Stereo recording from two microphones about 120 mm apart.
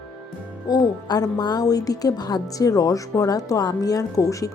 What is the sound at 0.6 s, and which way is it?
A woman's voice, 35° left (ahead or behind).